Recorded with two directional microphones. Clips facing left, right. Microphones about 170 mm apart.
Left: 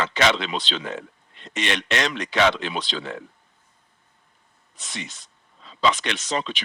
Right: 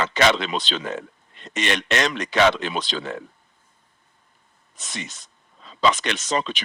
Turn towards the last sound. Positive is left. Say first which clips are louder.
# right 2 dB
turn(degrees=-45)  # may be behind; listen again after turning